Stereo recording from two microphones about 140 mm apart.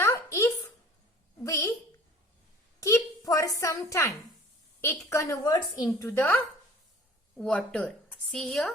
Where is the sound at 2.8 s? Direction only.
25° left (ahead or behind).